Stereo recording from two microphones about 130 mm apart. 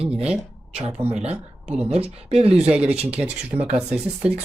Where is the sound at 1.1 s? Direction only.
55° right (ahead or behind).